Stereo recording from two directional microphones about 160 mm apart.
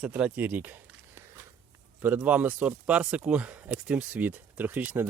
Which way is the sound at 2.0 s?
10° right (ahead or behind).